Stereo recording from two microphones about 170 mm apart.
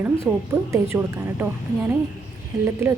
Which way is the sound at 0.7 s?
15° right (ahead or behind).